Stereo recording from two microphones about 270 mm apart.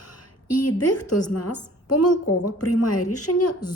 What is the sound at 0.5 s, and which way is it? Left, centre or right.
A woman's voice, left.